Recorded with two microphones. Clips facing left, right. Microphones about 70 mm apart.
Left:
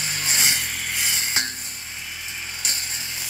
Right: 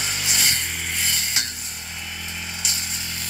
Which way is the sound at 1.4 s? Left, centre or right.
Left.